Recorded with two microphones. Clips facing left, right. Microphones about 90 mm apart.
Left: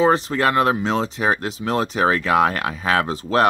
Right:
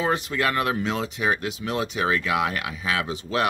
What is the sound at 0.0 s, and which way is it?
Speech, 35° left (ahead or behind).